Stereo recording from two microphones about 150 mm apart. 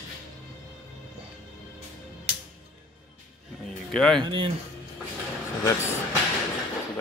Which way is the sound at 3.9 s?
5° left (ahead or behind).